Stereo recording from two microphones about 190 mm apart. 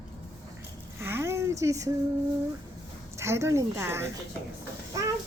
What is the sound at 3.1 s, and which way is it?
Speech, 15° right (ahead or behind).